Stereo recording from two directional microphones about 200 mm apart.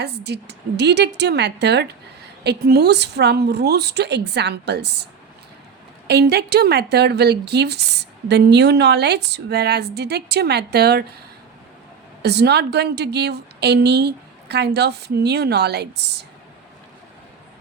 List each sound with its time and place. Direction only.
0.0 s a woman's voice: 55° right (ahead or behind)
6.1 s a woman's voice: 55° right (ahead or behind)
12.2 s a woman's voice: 55° right (ahead or behind)